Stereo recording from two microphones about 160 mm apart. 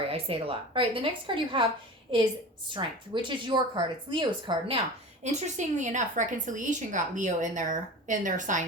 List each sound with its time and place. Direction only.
0.1 s a woman's voice: 35° right (ahead or behind)
5.2 s a woman's voice: 45° right (ahead or behind)